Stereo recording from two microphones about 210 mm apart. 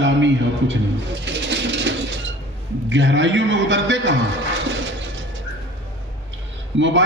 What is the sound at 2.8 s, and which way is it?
A man's voice, 60° right (ahead or behind).